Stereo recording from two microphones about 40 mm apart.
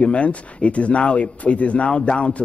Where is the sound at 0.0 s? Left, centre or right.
Left.